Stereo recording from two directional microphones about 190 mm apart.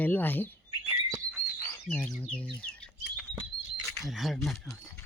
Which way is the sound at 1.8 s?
5° left (ahead or behind).